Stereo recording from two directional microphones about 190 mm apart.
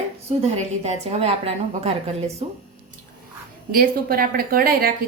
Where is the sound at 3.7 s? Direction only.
50° right (ahead or behind).